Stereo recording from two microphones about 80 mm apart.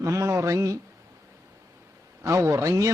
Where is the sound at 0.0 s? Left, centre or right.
Right.